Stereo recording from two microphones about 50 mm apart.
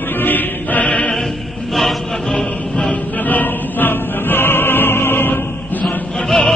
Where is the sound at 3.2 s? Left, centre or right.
Left.